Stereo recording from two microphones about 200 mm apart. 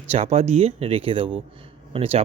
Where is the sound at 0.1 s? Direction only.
30° right (ahead or behind).